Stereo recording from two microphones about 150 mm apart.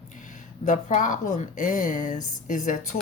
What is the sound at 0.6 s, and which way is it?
A woman's voice, 55° left (ahead or behind).